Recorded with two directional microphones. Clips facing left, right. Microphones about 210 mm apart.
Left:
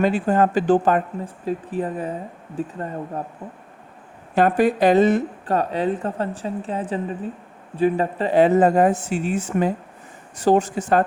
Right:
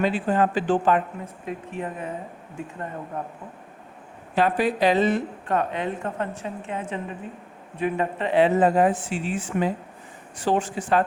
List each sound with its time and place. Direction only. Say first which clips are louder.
0.0 s a woman's voice: left 4 dB; 45° left (ahead or behind)
4.4 s a woman's voice: left 4 dB; 45° left (ahead or behind)